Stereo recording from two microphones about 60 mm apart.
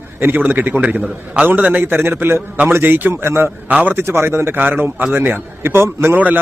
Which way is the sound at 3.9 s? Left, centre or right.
Right.